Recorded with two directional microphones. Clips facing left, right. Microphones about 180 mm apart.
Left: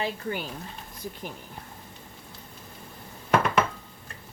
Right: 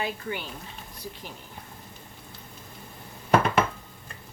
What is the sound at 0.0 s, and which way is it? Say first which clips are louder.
Speech: left 1 dB; 40° left (ahead or behind).